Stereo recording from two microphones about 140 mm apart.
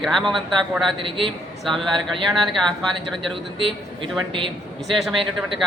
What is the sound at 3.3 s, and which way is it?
Speech, 40° right (ahead or behind).